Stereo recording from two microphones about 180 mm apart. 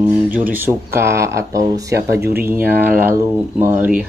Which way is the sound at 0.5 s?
10° right (ahead or behind).